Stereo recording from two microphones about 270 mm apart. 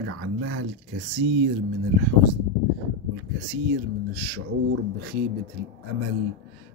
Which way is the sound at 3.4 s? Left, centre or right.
Right.